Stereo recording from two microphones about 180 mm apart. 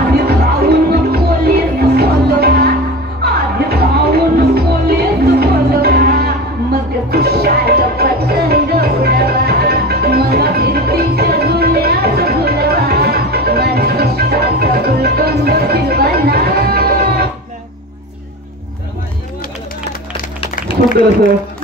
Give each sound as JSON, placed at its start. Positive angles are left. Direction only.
{"t": 0.1, "sound": "music", "side_deg": -60}